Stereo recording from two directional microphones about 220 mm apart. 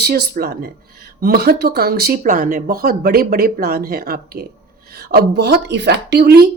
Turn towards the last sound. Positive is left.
turn(degrees=-45)  # may be behind; listen again after turning